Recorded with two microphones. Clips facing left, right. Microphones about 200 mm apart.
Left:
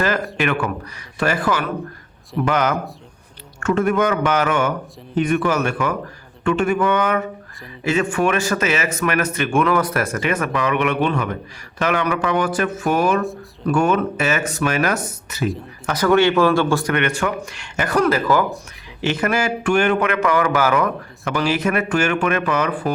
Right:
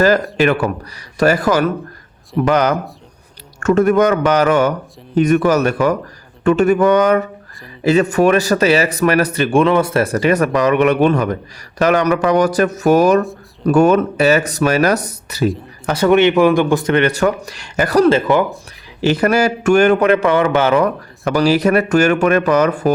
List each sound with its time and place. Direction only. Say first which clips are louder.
0.0 s speech: right 7 dB; 35° right (ahead or behind)
15.9 s speech: right 4 dB; 25° right (ahead or behind)
16.9 s speech: right 6 dB; 35° right (ahead or behind)